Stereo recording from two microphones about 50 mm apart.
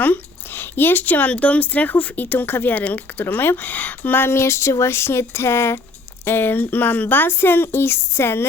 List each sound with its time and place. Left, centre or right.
0.0 s speech: left
1.3 s speech: left
6.2 s speech: left